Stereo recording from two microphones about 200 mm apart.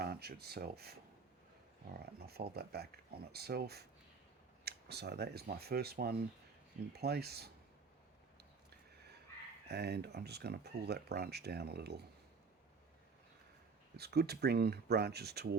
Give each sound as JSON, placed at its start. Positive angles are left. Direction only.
{"t": 0.0, "sound": "speech", "side_deg": -50}
{"t": 9.6, "sound": "speech", "side_deg": -55}
{"t": 13.9, "sound": "speech", "side_deg": -55}